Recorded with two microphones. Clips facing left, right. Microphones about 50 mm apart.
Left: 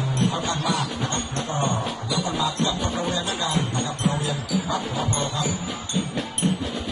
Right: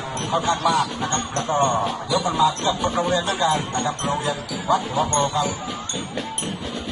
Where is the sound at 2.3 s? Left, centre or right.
Centre.